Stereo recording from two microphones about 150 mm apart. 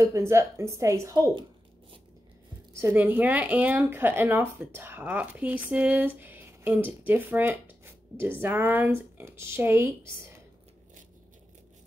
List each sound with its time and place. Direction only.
0.0 s a woman's voice: 20° right (ahead or behind)
2.7 s speech: 15° right (ahead or behind)